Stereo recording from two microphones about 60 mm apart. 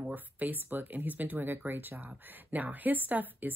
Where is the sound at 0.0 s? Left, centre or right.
Right.